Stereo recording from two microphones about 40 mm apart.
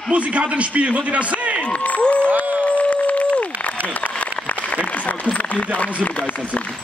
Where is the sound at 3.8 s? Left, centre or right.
Left.